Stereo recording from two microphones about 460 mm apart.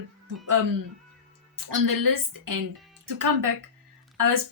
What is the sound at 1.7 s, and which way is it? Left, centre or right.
A woman's voice, right.